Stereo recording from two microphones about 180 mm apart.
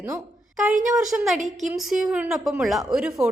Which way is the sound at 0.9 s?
5° right (ahead or behind).